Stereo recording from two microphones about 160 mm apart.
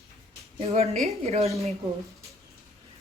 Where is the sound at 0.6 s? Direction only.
40° right (ahead or behind).